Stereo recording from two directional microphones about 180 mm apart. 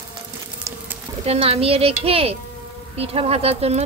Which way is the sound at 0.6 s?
10° right (ahead or behind).